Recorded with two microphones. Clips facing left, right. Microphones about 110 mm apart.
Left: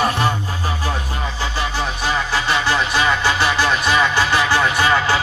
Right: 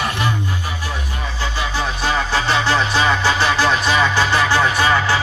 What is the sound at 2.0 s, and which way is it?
Music, 10° left (ahead or behind).